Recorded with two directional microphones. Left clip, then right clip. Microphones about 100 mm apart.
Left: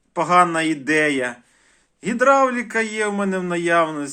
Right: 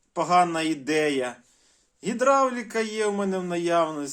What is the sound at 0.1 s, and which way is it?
A man's voice, 20° right (ahead or behind).